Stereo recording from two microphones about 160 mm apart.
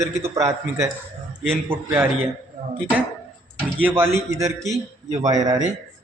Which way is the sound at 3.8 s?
15° right (ahead or behind).